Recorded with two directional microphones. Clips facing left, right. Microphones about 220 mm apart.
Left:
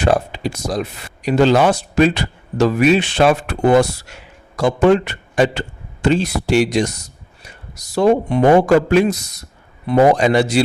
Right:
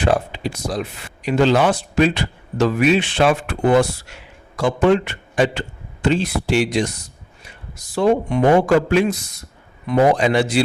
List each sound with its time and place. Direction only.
0.0 s a man's voice: 45° left (ahead or behind)